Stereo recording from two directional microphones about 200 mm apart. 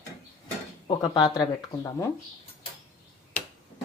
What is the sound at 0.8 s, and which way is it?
Speech, 25° left (ahead or behind).